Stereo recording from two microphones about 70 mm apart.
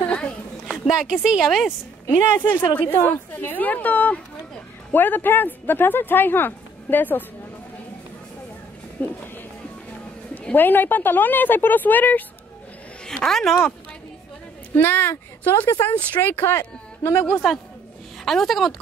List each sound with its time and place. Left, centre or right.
0.0 s a sound: centre
0.7 s speech: centre
1.4 s speech: centre
2.7 s speech: left
9.0 s speech: left
10.5 s speech: left
13.0 s speech: centre
14.8 s speech: left
18.2 s speech: centre